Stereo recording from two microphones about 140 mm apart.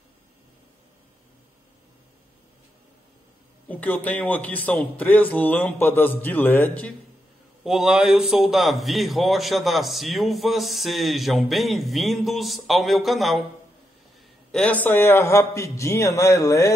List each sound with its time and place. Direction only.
3.6 s a man's voice: 10° left (ahead or behind)
7.6 s a man's voice: 5° right (ahead or behind)
14.5 s a man's voice: 10° left (ahead or behind)